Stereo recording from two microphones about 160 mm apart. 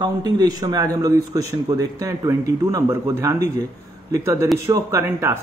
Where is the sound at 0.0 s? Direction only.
25° right (ahead or behind).